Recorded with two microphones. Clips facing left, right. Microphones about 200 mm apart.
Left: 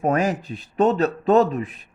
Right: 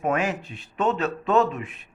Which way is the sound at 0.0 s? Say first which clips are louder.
Left 4 dB; 40° left (ahead or behind).